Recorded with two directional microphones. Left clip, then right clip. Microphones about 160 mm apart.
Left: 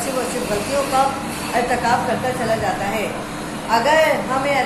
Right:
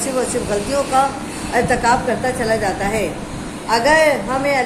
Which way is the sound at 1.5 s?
45° right (ahead or behind).